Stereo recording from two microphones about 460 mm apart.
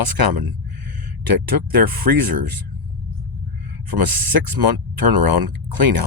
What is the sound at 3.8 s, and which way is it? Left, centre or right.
Speech, right.